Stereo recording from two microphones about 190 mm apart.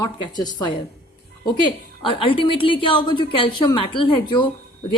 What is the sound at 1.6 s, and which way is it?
A woman's voice, 25° left (ahead or behind).